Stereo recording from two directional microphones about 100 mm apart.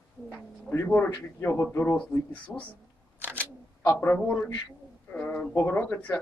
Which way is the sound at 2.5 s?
5° left (ahead or behind).